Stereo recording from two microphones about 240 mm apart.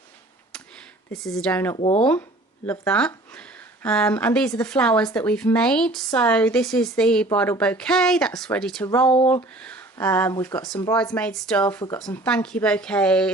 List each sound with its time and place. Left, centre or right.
1.1 s speech: centre
1.7 s speech: left
2.6 s speech: centre